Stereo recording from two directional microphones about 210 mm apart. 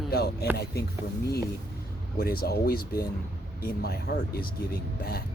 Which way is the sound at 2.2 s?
45° left (ahead or behind).